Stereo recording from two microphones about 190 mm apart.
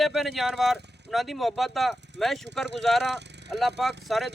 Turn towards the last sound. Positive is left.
turn(degrees=0)  # may be behind; listen again after turning